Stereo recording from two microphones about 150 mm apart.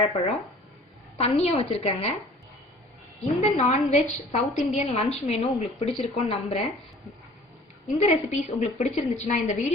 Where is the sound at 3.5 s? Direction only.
50° left (ahead or behind).